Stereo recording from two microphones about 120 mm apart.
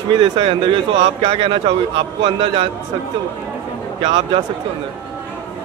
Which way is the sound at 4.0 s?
45° right (ahead or behind).